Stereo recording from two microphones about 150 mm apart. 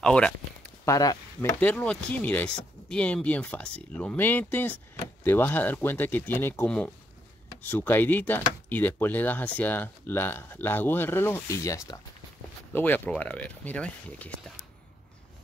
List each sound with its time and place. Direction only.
0.0 s speech: 5° left (ahead or behind)
0.8 s speech: 20° left (ahead or behind)
1.6 s speech: 10° left (ahead or behind)